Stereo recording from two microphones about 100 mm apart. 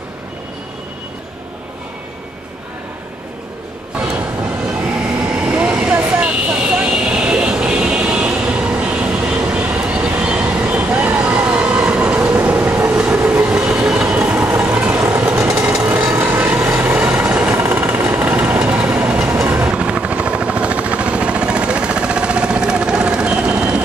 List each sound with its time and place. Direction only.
5.3 s vehicle: 15° right (ahead or behind)
14.1 s train: 10° right (ahead or behind)
15.3 s vehicle: 30° right (ahead or behind)
15.7 s a sound: 10° right (ahead or behind)
16.2 s vehicle: 25° right (ahead or behind)
19.5 s helicopter: 15° right (ahead or behind)